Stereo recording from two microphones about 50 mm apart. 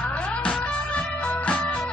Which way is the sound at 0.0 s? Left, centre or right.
Left.